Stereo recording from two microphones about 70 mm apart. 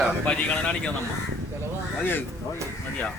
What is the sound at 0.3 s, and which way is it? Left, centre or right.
Speech, centre.